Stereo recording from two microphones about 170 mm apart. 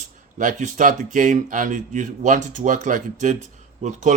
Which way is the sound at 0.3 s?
50° right (ahead or behind).